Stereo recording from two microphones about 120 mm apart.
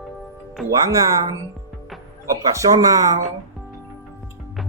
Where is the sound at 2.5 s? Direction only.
30° right (ahead or behind).